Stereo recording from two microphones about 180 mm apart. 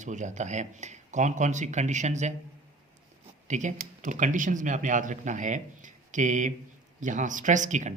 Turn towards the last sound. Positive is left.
turn(degrees=-40)  # may be behind; listen again after turning